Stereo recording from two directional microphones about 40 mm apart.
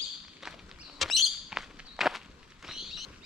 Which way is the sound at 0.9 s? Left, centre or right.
Centre.